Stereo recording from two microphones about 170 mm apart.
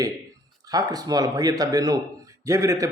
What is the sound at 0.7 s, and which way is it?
A man's voice, 20° right (ahead or behind).